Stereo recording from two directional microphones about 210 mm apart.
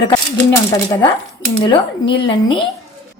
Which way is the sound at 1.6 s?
25° left (ahead or behind).